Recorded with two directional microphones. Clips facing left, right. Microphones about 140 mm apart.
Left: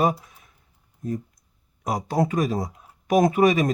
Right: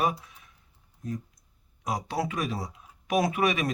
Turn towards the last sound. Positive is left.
turn(degrees=35)  # may be behind; listen again after turning